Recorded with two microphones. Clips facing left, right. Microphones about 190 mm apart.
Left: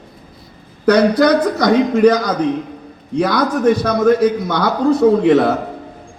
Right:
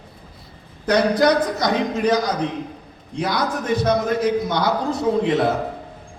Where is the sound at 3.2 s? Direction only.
60° left (ahead or behind).